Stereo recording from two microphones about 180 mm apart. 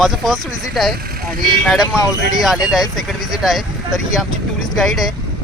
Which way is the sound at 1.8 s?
20° left (ahead or behind).